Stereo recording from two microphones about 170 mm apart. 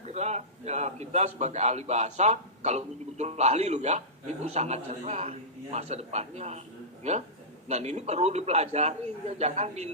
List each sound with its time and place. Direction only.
0.0 s a man's voice: 40° right (ahead or behind)